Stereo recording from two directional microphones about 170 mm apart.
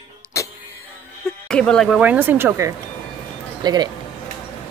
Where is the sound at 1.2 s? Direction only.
5° left (ahead or behind); by 3.9 s 25° right (ahead or behind).